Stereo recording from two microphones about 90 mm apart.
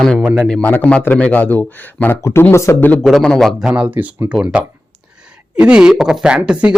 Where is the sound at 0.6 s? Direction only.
20° left (ahead or behind).